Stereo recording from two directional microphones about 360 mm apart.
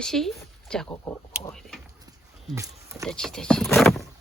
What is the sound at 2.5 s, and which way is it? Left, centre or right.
Speech, centre.